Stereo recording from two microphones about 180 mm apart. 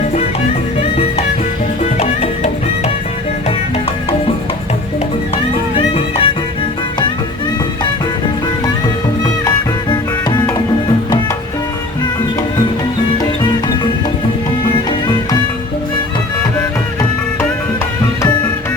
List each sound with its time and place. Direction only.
2.0 s music: 35° left (ahead or behind)
5.7 s music: 30° left (ahead or behind)